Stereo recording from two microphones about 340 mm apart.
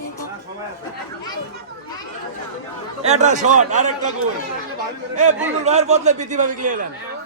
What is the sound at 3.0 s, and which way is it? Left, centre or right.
Speech, centre.